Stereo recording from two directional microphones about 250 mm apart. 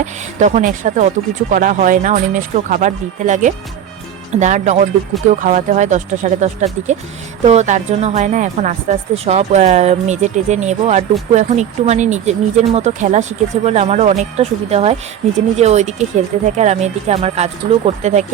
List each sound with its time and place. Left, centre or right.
0.0 s a woman's voice: right